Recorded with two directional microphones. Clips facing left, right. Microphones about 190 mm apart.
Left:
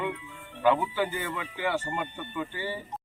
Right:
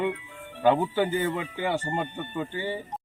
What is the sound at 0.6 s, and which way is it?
Speech, 30° right (ahead or behind).